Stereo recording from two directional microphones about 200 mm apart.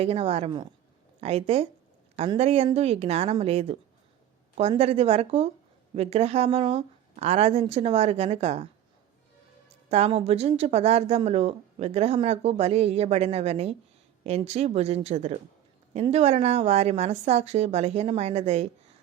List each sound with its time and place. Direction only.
0.0 s speech: 30° right (ahead or behind)
9.9 s speech: 30° right (ahead or behind)